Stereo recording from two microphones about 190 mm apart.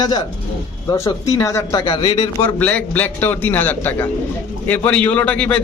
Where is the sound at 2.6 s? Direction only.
10° left (ahead or behind).